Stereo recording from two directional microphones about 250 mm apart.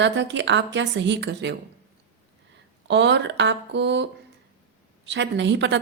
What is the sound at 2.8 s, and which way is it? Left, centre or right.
A woman's voice, right.